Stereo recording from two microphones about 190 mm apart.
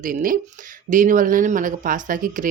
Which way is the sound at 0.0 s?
45° right (ahead or behind).